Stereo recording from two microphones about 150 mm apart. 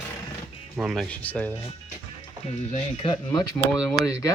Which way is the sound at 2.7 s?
40° left (ahead or behind).